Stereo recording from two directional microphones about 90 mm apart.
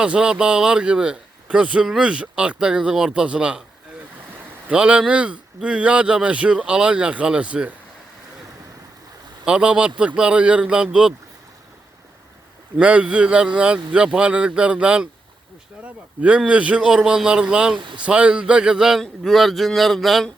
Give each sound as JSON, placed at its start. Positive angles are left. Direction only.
{"t": 0.0, "sound": "speech", "side_deg": -10}
{"t": 4.7, "sound": "speech", "side_deg": -10}
{"t": 9.4, "sound": "speech", "side_deg": -10}
{"t": 12.8, "sound": "speech", "side_deg": -15}
{"t": 17.7, "sound": "speech", "side_deg": -65}
{"t": 18.0, "sound": "speech", "side_deg": -10}